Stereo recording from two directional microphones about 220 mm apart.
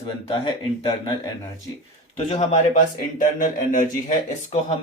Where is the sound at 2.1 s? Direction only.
30° left (ahead or behind).